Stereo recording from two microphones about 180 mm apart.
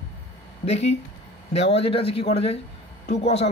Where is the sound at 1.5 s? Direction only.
35° left (ahead or behind).